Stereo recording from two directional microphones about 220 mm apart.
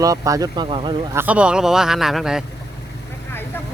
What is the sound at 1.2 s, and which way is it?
A man's voice, 5° right (ahead or behind).